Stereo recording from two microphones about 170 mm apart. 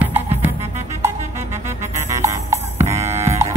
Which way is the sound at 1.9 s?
15° right (ahead or behind).